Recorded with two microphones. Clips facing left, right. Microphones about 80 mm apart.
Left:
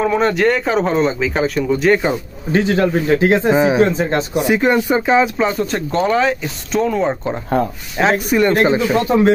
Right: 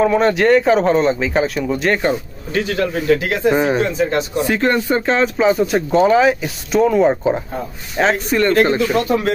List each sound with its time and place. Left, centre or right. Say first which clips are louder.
0.0 s speech: right 1 dB; centre
2.5 s speech: left 4 dB; left
3.5 s speech: left 2 dB; centre
4.3 s speech: left 2 dB; centre
5.4 s speech: right 3 dB; centre
8.0 s speech: left 1 dB; centre; by 9.3 s left